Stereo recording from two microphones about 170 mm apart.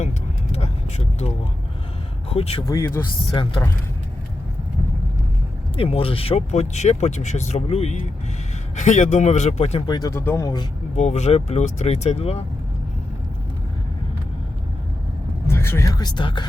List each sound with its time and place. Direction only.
0.5 s vehicle: 40° left (ahead or behind)
2.3 s speech: 35° left (ahead or behind)
2.6 s speech: 15° left (ahead or behind)
5.7 s speech: 35° left (ahead or behind)
10.9 s speech: 40° left (ahead or behind)
15.4 s speech: 15° left (ahead or behind)